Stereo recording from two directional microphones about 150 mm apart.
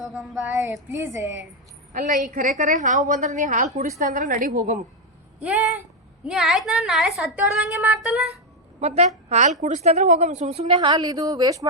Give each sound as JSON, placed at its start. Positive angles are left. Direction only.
{"t": 0.0, "sound": "child singing", "side_deg": 0}
{"t": 0.9, "sound": "a woman's voice", "side_deg": -20}
{"t": 1.9, "sound": "a woman's voice", "side_deg": -65}
{"t": 5.4, "sound": "speech", "side_deg": -10}
{"t": 6.2, "sound": "child singing", "side_deg": -5}
{"t": 8.8, "sound": "a woman's voice", "side_deg": -50}